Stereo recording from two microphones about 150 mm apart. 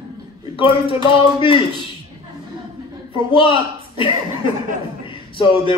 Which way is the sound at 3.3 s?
35° left (ahead or behind).